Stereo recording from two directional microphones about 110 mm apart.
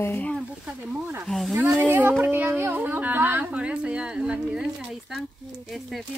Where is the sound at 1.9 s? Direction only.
20° right (ahead or behind).